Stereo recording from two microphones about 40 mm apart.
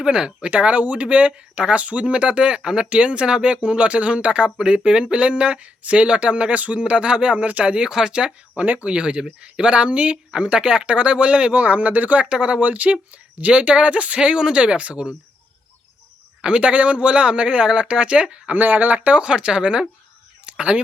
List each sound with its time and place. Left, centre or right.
0.0 s speech: right
0.4 s speech: right; by 2.8 s centre
2.9 s speech: right
7.9 s speech: centre
8.5 s speech: right
8.9 s speech: right
12.2 s speech: right
16.4 s speech: right
18.5 s speech: right
20.4 s a sound: right